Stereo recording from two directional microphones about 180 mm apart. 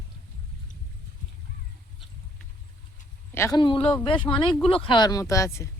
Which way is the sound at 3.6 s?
30° left (ahead or behind).